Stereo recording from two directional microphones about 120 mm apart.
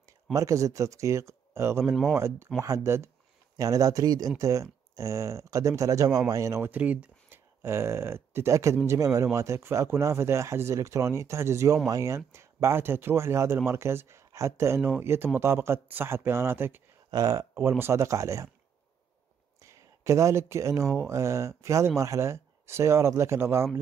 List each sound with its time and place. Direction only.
0.3 s speech: 25° right (ahead or behind)
17.1 s speech: 30° right (ahead or behind)
19.6 s speech: 25° right (ahead or behind)